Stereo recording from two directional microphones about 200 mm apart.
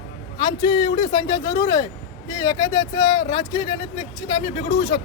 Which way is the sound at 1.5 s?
20° left (ahead or behind).